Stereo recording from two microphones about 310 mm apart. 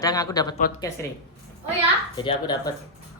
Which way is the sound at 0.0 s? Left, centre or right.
Centre.